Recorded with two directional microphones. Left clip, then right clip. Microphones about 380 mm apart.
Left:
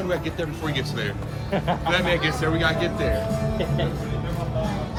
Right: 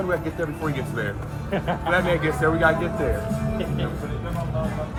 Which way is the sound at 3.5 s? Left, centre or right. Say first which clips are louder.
Left 2 dB; left.